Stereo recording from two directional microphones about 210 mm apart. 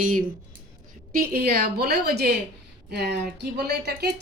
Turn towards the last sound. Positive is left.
turn(degrees=-50)  # may be behind; listen again after turning